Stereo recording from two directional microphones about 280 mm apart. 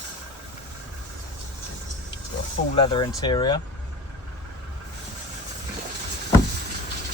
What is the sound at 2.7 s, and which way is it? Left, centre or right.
Speech, centre.